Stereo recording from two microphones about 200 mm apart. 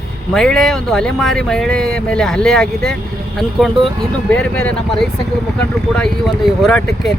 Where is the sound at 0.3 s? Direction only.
Centre (ahead or behind).